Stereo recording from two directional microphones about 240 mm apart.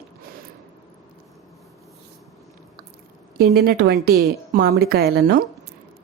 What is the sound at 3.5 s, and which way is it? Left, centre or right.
A woman's voice, right.